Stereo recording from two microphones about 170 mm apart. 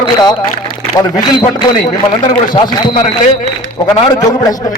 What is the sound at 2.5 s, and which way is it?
A man's voice, 25° left (ahead or behind).